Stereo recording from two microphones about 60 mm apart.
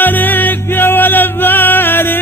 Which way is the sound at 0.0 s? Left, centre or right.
Left.